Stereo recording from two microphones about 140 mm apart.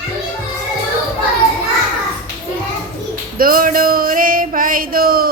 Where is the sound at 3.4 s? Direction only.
90° right.